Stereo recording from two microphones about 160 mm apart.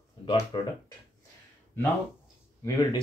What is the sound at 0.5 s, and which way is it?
Speech, 30° left (ahead or behind).